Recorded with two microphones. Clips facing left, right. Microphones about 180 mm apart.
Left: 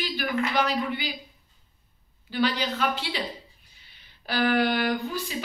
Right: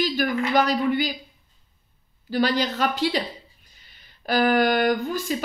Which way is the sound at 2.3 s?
40° right (ahead or behind).